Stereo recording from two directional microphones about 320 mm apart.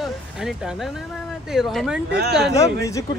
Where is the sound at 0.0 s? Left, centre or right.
Centre.